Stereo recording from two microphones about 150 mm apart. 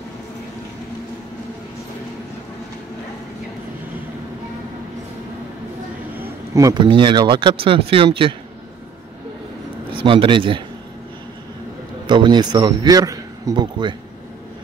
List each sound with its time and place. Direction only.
6.1 s speech: 20° right (ahead or behind); by 8.4 s 35° right (ahead or behind)
9.9 s speech: 35° right (ahead or behind)
12.1 s a man's voice: 30° right (ahead or behind)